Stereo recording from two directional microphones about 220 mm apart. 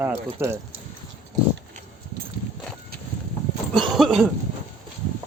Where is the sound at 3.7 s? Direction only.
Centre (ahead or behind).